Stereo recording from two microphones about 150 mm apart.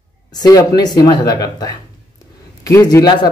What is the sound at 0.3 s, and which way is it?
Speech, 25° left (ahead or behind).